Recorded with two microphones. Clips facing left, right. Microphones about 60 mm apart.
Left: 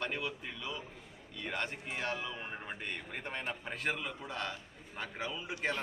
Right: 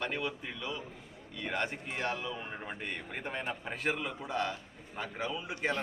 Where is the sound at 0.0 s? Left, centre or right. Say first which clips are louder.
Right 2 dB; centre.